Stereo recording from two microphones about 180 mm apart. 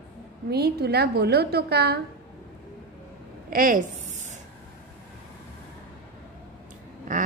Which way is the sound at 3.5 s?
50° right (ahead or behind).